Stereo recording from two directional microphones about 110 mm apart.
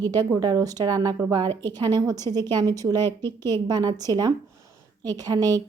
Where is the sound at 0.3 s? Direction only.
35° right (ahead or behind).